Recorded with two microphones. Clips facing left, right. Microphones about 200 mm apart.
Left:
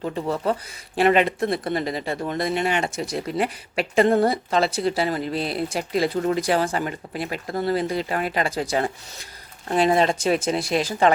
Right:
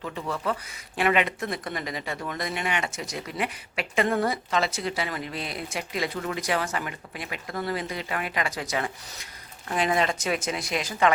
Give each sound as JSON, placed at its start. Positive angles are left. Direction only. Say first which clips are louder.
{"t": 0.0, "sound": "speech", "louder": "left 6 dB", "side_deg": 35}